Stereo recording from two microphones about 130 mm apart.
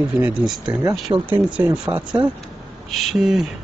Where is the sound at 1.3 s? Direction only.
15° right (ahead or behind).